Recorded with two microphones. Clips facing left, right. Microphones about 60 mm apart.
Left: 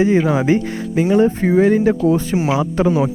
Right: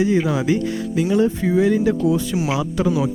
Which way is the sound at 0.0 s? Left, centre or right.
Left.